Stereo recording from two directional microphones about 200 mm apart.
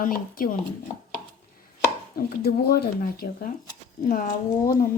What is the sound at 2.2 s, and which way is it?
Speech, 50° left (ahead or behind).